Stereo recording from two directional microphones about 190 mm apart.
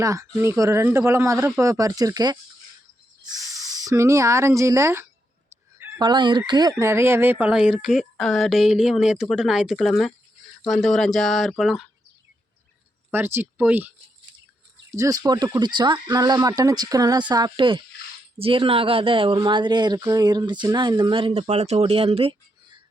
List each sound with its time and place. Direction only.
0.0 s speech: 15° right (ahead or behind)
13.1 s speech: 10° right (ahead or behind); by 22.8 s 30° right (ahead or behind)